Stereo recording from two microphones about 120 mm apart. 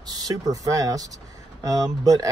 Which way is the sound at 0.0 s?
35° right (ahead or behind).